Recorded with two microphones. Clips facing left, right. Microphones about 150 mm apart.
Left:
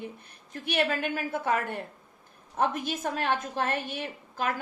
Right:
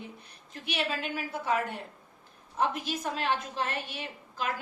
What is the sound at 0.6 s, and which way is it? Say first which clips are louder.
A woman's voice: left 5 dB; 50° left (ahead or behind).